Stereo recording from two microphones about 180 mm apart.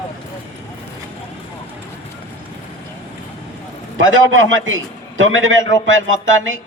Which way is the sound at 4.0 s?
90° right.